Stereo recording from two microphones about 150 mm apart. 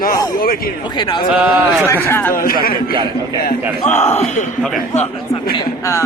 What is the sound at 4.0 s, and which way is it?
Speech, 50° left (ahead or behind).